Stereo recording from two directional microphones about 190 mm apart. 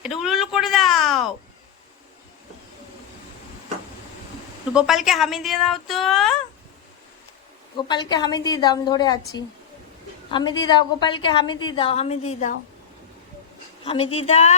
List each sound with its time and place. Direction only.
0.0 s a sound: centre (ahead or behind)
4.7 s speech: 5° right (ahead or behind)
7.8 s a woman's voice: 25° left (ahead or behind)
13.8 s a woman's voice: 30° left (ahead or behind)